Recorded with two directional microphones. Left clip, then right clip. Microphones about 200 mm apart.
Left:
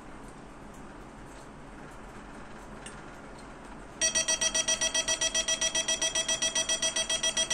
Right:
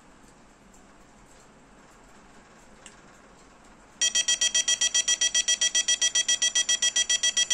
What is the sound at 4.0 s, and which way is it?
Alarm, 15° right (ahead or behind).